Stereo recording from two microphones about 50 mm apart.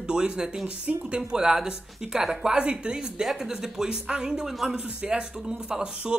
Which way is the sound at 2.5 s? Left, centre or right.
Right.